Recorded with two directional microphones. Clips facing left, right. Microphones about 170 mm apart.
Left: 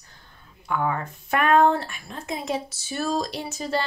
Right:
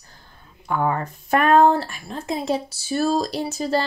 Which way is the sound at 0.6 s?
40° right (ahead or behind).